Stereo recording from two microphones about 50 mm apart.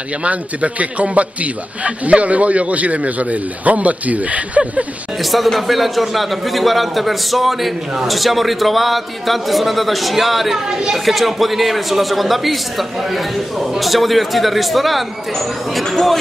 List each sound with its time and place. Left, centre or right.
0.2 s a man's voice: right
5.2 s a man's voice: centre